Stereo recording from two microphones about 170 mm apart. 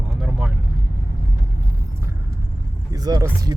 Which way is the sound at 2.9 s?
20° right (ahead or behind).